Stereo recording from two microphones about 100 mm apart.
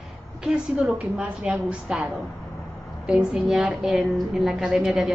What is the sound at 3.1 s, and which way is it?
A woman's voice, 5° right (ahead or behind).